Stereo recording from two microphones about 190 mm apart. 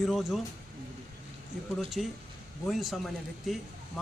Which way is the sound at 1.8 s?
Centre (ahead or behind).